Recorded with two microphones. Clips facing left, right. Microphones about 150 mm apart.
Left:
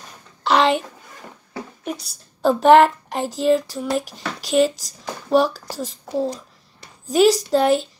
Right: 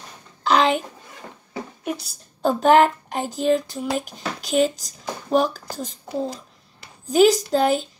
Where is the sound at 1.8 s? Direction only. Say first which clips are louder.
Right 1 dB; centre (ahead or behind).